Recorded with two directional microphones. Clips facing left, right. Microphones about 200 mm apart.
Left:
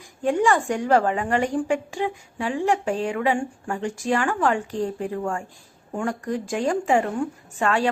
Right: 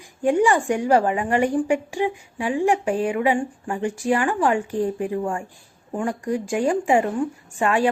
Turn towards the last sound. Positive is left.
turn(degrees=-15)  # may be behind; listen again after turning